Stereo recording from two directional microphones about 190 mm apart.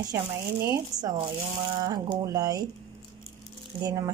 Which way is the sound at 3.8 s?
20° right (ahead or behind).